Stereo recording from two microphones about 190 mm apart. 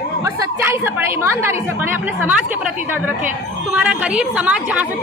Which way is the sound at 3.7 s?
5° right (ahead or behind).